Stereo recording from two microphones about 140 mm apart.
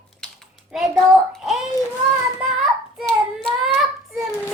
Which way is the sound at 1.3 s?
Centre (ahead or behind).